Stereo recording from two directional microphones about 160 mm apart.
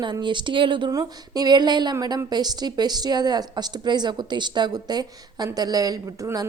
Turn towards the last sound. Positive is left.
turn(degrees=-20)  # may be behind; listen again after turning